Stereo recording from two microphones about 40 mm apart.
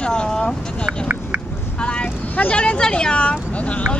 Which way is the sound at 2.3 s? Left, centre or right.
Left.